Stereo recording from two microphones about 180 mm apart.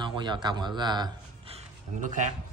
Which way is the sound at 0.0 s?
25° right (ahead or behind).